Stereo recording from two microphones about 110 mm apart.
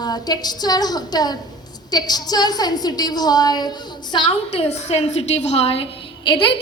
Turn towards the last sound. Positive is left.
turn(degrees=50)  # may be behind; listen again after turning